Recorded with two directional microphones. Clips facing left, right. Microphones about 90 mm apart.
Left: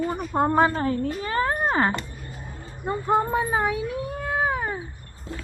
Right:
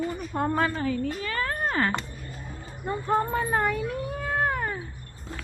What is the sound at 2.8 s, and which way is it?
Speech, 5° left (ahead or behind).